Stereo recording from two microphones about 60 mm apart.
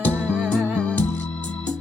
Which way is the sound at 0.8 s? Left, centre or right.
Left.